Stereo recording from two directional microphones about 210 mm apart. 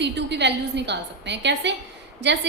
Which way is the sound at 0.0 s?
55° right (ahead or behind).